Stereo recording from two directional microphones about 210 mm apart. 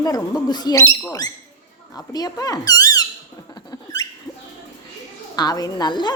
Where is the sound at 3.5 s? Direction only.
20° left (ahead or behind).